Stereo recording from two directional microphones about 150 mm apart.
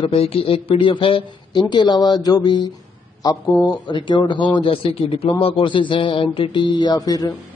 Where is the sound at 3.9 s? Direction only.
30° left (ahead or behind).